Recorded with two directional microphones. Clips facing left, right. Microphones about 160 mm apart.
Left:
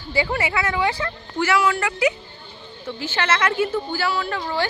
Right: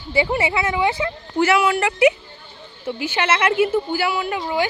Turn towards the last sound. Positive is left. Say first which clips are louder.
# right 2 dB
turn(degrees=-15)  # may be behind; listen again after turning